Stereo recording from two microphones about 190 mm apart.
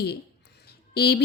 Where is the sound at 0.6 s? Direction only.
55° left (ahead or behind).